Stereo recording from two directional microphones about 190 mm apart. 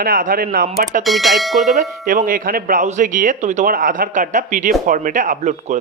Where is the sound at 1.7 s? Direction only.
40° right (ahead or behind).